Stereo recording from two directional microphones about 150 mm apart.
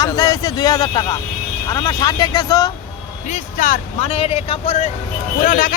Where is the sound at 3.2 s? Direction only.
55° left (ahead or behind).